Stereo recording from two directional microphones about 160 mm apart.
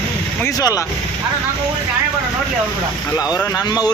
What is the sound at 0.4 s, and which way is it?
Speech, 20° left (ahead or behind).